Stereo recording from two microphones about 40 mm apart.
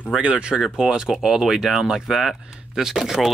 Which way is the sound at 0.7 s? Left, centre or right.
Centre.